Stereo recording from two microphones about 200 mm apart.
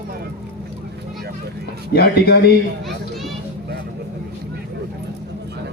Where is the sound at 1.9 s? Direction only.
55° left (ahead or behind).